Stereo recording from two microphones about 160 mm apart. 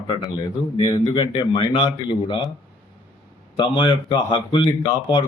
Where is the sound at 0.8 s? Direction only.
25° left (ahead or behind).